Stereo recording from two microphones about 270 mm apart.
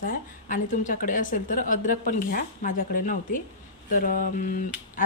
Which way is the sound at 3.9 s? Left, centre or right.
Left.